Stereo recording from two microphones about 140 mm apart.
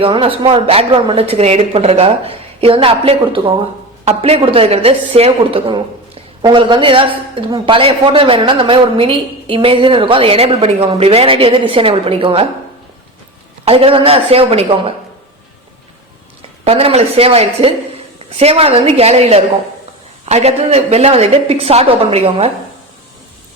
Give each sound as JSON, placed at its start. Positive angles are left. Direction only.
{"t": 0.0, "sound": "speech", "side_deg": -40}
{"t": 13.7, "sound": "speech", "side_deg": -40}
{"t": 16.6, "sound": "speech", "side_deg": -45}